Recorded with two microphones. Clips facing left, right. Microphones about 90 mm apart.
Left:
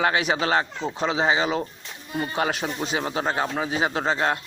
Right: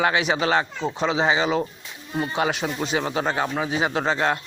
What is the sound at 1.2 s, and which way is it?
Speech, 30° left (ahead or behind).